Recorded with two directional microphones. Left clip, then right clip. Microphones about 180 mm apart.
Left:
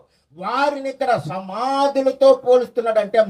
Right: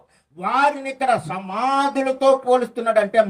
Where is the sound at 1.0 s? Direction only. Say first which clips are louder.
Even; 60° left (ahead or behind).